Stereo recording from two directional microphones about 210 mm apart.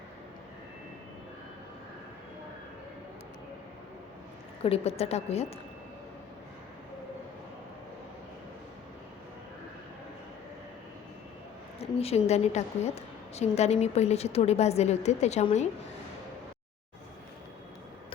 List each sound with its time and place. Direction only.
4.6 s a woman's voice: 30° left (ahead or behind)
11.8 s a woman's voice: 30° left (ahead or behind)